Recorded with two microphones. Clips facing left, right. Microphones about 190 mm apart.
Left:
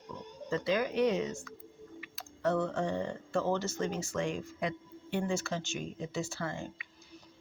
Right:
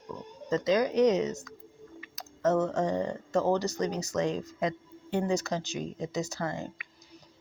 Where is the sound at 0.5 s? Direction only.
40° right (ahead or behind).